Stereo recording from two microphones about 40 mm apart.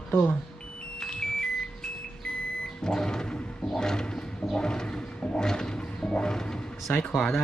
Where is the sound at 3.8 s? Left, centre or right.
Centre.